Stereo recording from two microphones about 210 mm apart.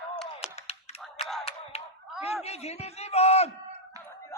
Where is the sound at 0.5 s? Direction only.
30° left (ahead or behind).